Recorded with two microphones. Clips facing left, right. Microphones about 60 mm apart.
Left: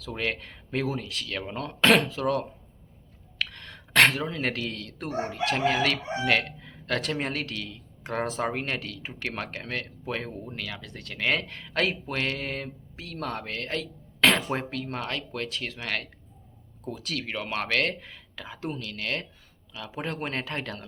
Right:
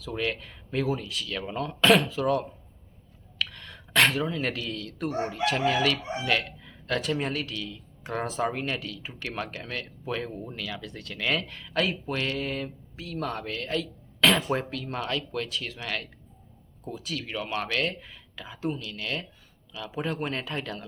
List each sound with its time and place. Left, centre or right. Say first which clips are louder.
0.1 s crowing: right 1 dB; left
3.3 s a sound: even; left
4.3 s crowing: even; left
16.9 s speech: left 1 dB; left
17.5 s crowing: left 2 dB; left
19.7 s crowing: right 2 dB; left